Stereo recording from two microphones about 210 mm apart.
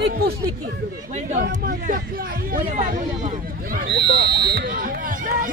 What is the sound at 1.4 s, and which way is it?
Speech, 45° right (ahead or behind).